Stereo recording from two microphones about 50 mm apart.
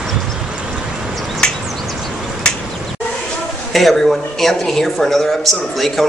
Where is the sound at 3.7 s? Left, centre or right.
Centre.